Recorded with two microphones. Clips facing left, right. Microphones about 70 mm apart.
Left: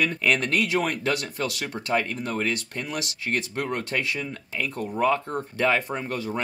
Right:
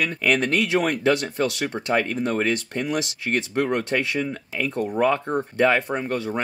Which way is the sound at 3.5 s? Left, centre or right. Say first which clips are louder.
Right 5 dB; right.